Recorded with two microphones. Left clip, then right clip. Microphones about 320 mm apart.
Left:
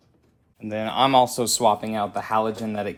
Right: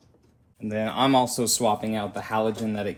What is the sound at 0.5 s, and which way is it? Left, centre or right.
Speech, left.